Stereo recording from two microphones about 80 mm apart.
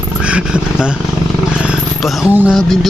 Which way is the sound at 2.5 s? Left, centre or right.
Centre.